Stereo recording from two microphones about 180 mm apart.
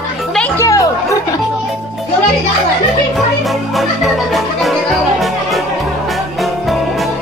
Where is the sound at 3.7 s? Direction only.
Centre (ahead or behind).